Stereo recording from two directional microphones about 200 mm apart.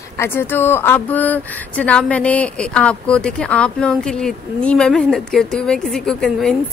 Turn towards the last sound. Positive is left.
turn(degrees=0)  # may be behind; listen again after turning